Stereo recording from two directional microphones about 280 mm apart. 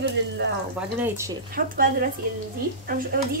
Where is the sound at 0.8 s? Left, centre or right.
Centre.